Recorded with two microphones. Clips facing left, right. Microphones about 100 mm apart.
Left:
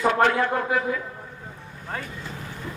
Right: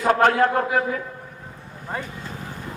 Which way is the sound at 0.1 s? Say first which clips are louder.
Right 8 dB; 45° right (ahead or behind).